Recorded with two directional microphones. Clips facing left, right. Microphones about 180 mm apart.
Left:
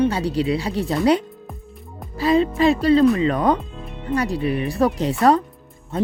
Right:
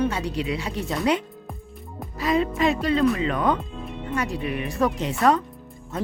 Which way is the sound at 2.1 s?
30° left (ahead or behind).